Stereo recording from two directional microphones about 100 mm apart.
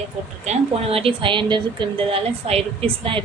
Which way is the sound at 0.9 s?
65° right (ahead or behind).